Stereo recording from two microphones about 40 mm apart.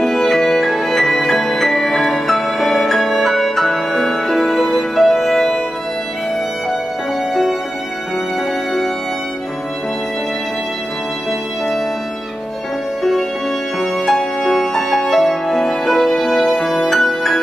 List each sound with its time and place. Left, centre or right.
0.0 s music: centre
13.7 s music: centre